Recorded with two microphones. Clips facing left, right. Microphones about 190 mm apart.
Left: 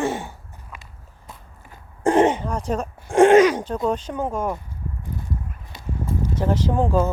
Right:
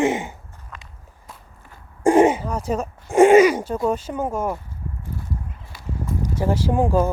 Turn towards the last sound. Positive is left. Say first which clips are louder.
# right 1 dB
turn(degrees=-10)  # may be behind; listen again after turning